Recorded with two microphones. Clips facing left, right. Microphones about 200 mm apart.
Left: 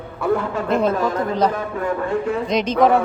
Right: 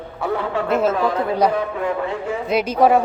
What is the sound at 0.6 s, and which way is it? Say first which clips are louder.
Speech: even; 5° right (ahead or behind).